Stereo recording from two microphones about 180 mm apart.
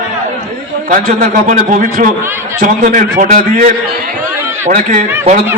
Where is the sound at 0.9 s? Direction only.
50° right (ahead or behind).